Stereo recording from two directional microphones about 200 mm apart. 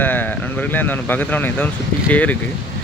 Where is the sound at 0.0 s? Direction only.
10° left (ahead or behind).